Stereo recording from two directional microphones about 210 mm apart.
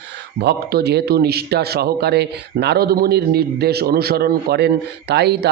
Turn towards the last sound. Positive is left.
turn(degrees=-50)  # may be behind; listen again after turning